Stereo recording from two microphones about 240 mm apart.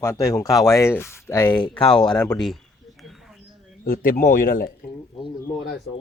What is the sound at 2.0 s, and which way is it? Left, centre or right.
Speech, centre.